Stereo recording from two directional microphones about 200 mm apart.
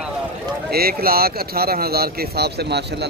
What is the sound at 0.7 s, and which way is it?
Speech, 50° right (ahead or behind).